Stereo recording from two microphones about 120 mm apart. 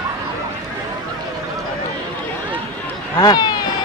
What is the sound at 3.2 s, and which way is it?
Speech, 35° left (ahead or behind).